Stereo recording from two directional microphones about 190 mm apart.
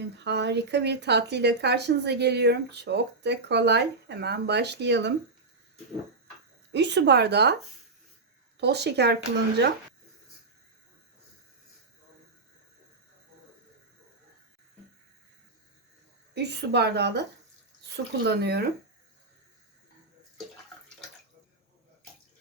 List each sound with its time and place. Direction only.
0.0 s speech: 65° right (ahead or behind)
6.7 s speech: 65° right (ahead or behind)
8.5 s speech: 60° right (ahead or behind)
16.3 s speech: 60° right (ahead or behind)